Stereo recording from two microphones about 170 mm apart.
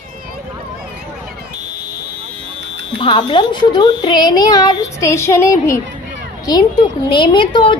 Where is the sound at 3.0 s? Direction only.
30° left (ahead or behind).